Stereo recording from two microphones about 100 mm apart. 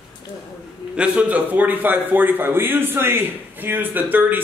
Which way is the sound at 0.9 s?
10° right (ahead or behind).